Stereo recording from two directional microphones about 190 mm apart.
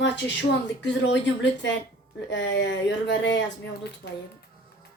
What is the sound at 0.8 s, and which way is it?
Speech, 70° left (ahead or behind).